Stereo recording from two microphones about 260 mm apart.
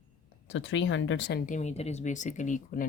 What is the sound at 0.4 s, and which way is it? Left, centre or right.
Speech, left.